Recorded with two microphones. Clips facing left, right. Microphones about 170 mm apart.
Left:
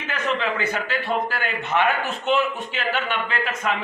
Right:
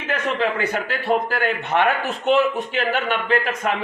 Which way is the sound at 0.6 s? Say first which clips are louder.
Right 2 dB; 40° right (ahead or behind).